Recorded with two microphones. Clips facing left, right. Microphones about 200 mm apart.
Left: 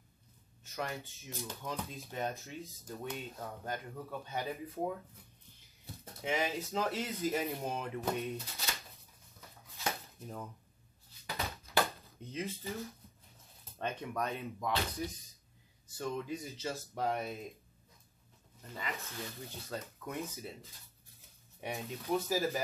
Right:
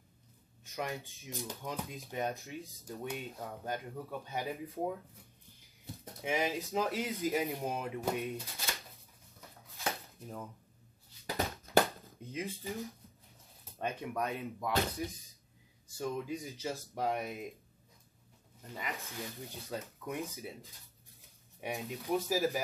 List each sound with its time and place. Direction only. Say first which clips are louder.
0.7 s speech: right 1 dB; 15° right (ahead or behind)
6.2 s speech: right 1 dB; 15° right (ahead or behind)
9.8 s a sound: even; centre (ahead or behind)
11.3 s a sound: right 6 dB; 50° right (ahead or behind)
12.0 s speech: even; 15° right (ahead or behind)
16.0 s speech: right 1 dB; 15° right (ahead or behind)
18.8 s speech: even; 15° right (ahead or behind)
21.5 s speech: right 1 dB; 15° right (ahead or behind)